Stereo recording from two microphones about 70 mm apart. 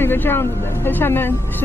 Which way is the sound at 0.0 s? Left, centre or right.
Left.